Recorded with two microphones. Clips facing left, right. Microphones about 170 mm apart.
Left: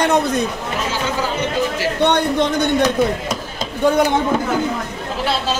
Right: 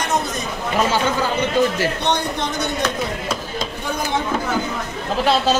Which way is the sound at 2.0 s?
55° left (ahead or behind).